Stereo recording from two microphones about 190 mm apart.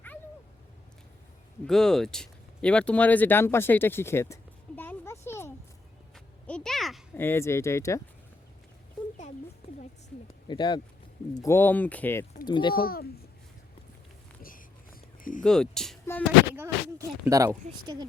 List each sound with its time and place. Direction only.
1.6 s speech: centre (ahead or behind)
6.1 s a sound: 5° left (ahead or behind)
7.1 s speech: 10° left (ahead or behind)
10.5 s speech: 25° left (ahead or behind)
11.4 s speech: 10° left (ahead or behind)
12.5 s speech: 25° left (ahead or behind)
12.7 s speech: 50° left (ahead or behind)
15.2 s speech: 45° left (ahead or behind)
15.4 s speech: 5° left (ahead or behind)
16.6 s speech: 15° right (ahead or behind)